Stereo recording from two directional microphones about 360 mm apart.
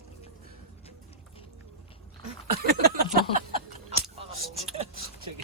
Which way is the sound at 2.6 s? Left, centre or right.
Right.